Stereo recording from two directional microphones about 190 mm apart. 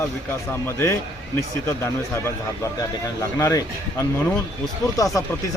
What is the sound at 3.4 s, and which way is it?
Speech, 15° left (ahead or behind).